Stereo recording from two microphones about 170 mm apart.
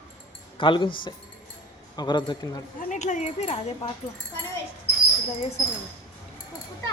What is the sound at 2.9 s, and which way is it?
Speech, 45° left (ahead or behind).